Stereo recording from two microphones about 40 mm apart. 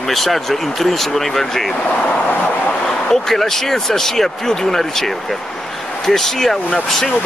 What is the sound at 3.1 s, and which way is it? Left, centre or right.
Speech, centre.